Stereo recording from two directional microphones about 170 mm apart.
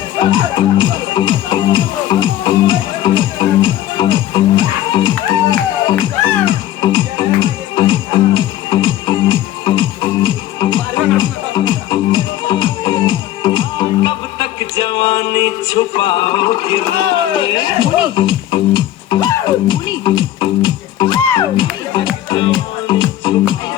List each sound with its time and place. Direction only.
0.2 s speech: 30° left (ahead or behind)
17.3 s music: 30° left (ahead or behind)